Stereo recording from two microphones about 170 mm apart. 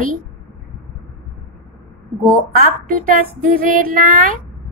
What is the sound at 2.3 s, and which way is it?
Speech, 55° right (ahead or behind).